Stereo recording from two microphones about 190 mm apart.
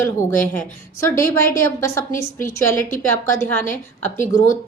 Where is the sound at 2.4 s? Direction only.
15° left (ahead or behind).